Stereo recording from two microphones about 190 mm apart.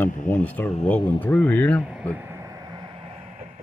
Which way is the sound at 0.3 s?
10° left (ahead or behind).